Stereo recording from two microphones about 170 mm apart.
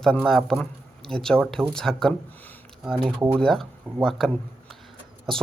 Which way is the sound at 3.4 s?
Centre (ahead or behind).